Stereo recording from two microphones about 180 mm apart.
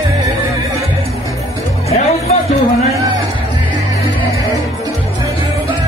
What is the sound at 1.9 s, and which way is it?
Music, 35° left (ahead or behind).